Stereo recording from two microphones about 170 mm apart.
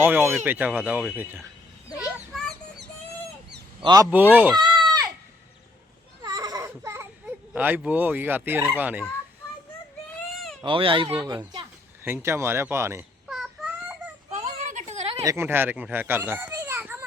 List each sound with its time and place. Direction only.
0.0 s speech: 10° right (ahead or behind)
2.1 s a sound: centre (ahead or behind)
3.8 s speech: 20° right (ahead or behind)
4.1 s speech: 10° right (ahead or behind)
4.5 s chicken: 25° right (ahead or behind)
6.2 s baby cry: 20° right (ahead or behind)
7.5 s speech: 10° right (ahead or behind)
10.6 s speech: 30° right (ahead or behind)
12.0 s speech: 15° right (ahead or behind)
13.2 s a sound: 5° right (ahead or behind)
14.3 s a sound: 40° right (ahead or behind)
15.2 s speech: 15° right (ahead or behind)